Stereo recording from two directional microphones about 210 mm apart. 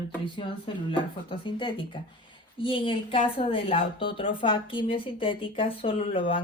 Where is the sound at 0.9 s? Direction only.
25° left (ahead or behind).